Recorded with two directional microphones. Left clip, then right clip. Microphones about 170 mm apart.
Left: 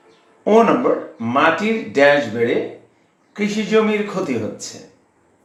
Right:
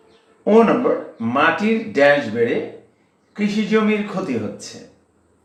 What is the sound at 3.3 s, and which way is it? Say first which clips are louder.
Speech: left 2 dB; 20° left (ahead or behind).